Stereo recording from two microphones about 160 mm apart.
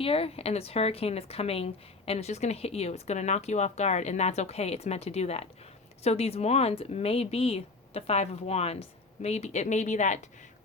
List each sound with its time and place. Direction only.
0.0 s speech: 35° left (ahead or behind)